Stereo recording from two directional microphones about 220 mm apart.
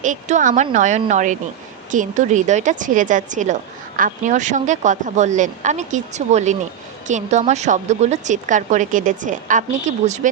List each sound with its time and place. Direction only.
0.0 s a woman's voice: 35° right (ahead or behind)